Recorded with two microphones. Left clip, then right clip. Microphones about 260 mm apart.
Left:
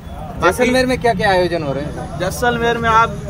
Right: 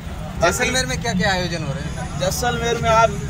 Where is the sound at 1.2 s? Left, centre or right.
Left.